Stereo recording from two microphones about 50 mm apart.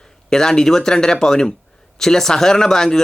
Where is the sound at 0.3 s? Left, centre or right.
Centre.